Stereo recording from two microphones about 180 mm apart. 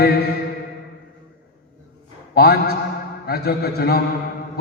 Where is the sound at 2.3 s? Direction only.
60° left (ahead or behind).